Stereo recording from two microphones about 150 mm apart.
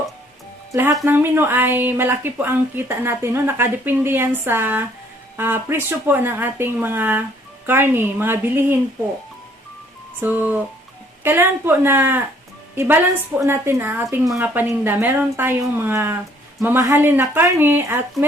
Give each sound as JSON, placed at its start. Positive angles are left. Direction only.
{"t": 0.7, "sound": "a woman's voice", "side_deg": -20}
{"t": 10.2, "sound": "a woman's voice", "side_deg": -10}